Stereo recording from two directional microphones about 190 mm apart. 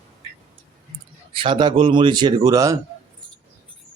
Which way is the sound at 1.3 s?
25° right (ahead or behind).